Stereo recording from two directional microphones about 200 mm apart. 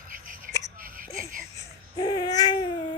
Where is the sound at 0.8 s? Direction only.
45° right (ahead or behind).